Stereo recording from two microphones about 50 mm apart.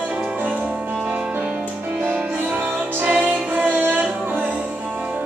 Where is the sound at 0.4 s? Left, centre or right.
Right.